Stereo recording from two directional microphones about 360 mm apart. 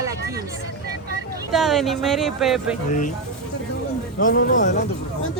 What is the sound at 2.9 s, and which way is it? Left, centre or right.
Speech, left.